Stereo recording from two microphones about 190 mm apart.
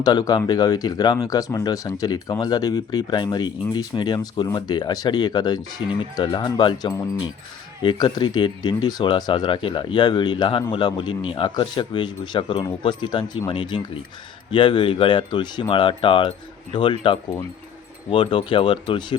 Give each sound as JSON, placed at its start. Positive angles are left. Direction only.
{"t": 0.0, "sound": "speech", "side_deg": 20}